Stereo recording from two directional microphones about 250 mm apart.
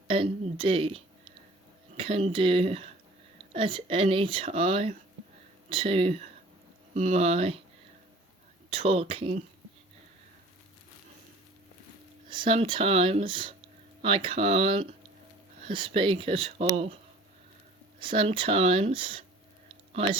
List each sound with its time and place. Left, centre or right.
0.1 s speech: right
8.7 s speech: right
12.3 s speech: centre
18.0 s speech: right
19.6 s a sound: right